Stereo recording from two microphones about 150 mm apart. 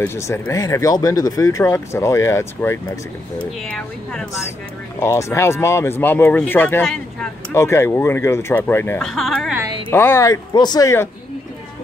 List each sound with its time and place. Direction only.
0.0 s speech: 20° left (ahead or behind)
3.6 s speech: 5° left (ahead or behind)
5.0 s speech: 20° left (ahead or behind)
9.0 s speech: centre (ahead or behind)
9.8 s speech: 15° left (ahead or behind)